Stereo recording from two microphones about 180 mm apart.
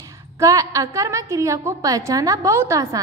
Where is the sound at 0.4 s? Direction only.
20° right (ahead or behind).